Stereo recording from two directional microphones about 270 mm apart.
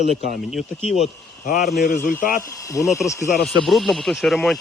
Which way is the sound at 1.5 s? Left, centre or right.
Left.